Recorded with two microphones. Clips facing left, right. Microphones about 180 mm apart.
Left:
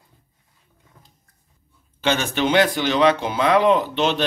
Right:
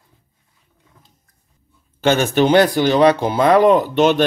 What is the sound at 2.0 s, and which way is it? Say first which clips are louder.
Speech: right 6 dB; 45° right (ahead or behind).